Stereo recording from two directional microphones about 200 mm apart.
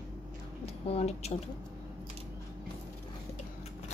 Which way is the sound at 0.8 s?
30° left (ahead or behind).